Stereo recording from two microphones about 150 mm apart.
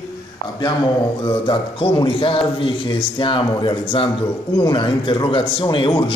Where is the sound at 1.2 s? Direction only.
35° left (ahead or behind).